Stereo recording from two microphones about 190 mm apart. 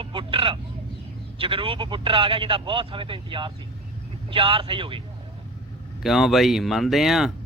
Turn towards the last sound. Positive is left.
turn(degrees=0)  # may be behind; listen again after turning